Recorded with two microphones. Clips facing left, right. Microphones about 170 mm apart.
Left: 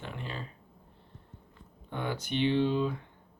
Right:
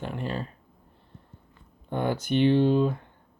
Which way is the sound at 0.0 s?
45° right (ahead or behind).